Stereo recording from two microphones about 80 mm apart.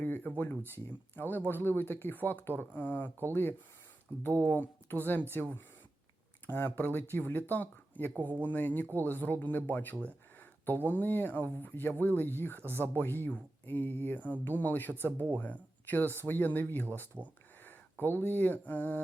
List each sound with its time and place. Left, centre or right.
0.0 s speech: left
4.2 s speech: left
12.5 s speech: right
12.8 s speech: left